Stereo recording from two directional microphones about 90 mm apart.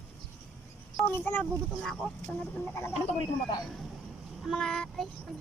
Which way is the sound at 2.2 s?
15° left (ahead or behind).